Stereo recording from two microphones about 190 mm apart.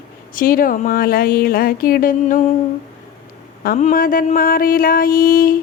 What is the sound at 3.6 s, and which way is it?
Speech, 50° left (ahead or behind).